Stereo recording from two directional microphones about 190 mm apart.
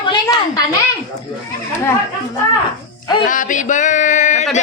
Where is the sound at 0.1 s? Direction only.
20° left (ahead or behind).